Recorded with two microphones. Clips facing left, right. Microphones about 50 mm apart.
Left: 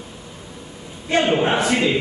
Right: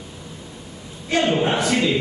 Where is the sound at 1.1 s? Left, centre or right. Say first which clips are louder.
Left 2 dB; centre.